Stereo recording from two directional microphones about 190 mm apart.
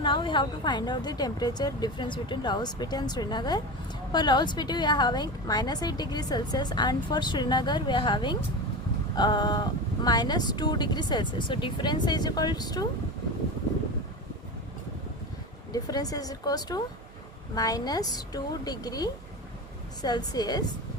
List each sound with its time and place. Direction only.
0.0 s a woman's voice: 25° left (ahead or behind)
15.7 s a woman's voice: 20° left (ahead or behind)